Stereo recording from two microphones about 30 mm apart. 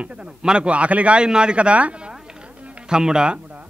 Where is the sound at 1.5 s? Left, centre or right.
Right.